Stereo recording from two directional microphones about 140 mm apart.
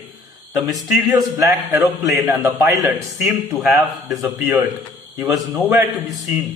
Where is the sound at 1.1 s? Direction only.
25° right (ahead or behind).